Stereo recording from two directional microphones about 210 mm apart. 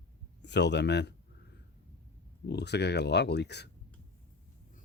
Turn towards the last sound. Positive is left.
turn(degrees=55)  # may be behind; listen again after turning